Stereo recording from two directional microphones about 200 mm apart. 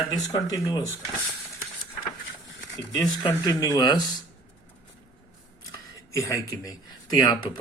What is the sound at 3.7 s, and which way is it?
Speech, 20° left (ahead or behind).